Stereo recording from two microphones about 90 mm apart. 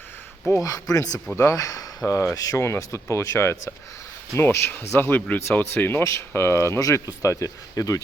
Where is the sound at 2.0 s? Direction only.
30° left (ahead or behind).